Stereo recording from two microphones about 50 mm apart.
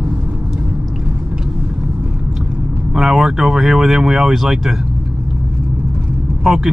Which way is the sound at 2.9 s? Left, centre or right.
Centre.